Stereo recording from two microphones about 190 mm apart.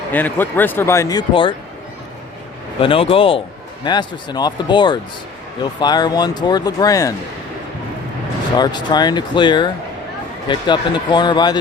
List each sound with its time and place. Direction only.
0.1 s speech: 10° left (ahead or behind); by 1.5 s 25° left (ahead or behind)
2.8 s speech: 30° left (ahead or behind)
8.5 s speech: 20° left (ahead or behind)